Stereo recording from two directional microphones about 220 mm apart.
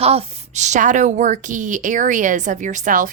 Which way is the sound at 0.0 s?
25° right (ahead or behind).